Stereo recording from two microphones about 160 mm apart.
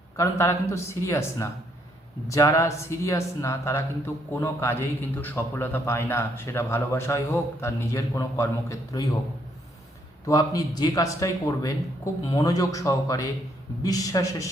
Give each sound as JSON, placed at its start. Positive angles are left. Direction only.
{"t": 0.2, "sound": "a man's voice", "side_deg": 15}
{"t": 10.2, "sound": "a man's voice", "side_deg": 25}